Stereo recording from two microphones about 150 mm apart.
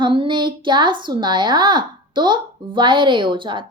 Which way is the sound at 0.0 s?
35° right (ahead or behind).